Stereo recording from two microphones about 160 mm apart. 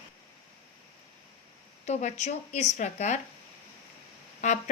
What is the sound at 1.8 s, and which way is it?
A woman's voice, 50° left (ahead or behind).